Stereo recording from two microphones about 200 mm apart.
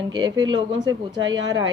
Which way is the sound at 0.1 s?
20° right (ahead or behind).